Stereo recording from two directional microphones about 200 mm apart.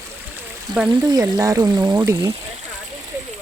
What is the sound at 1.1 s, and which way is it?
Speech, 20° right (ahead or behind).